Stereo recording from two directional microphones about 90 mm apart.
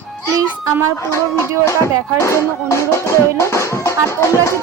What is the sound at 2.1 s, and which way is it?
Speech, 30° left (ahead or behind).